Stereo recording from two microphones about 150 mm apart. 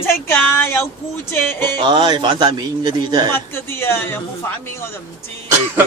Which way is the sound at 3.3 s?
15° left (ahead or behind).